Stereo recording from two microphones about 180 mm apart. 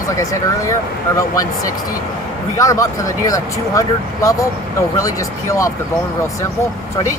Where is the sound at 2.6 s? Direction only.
15° left (ahead or behind).